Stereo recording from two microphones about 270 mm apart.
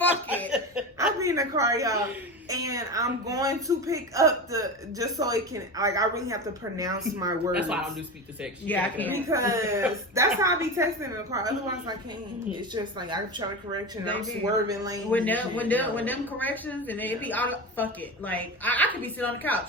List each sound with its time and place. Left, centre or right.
0.3 s chuckle: centre
2.5 s speech: centre
8.6 s speech: centre
9.1 s speech: centre
14.7 s speech: centre
15.1 s speech: centre